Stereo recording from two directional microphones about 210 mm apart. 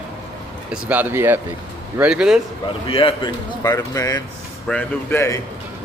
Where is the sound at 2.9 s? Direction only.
25° left (ahead or behind).